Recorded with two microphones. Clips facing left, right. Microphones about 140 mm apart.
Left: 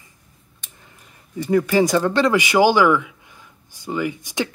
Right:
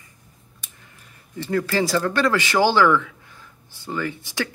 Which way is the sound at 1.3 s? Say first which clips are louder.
Left 5 dB; 15° left (ahead or behind).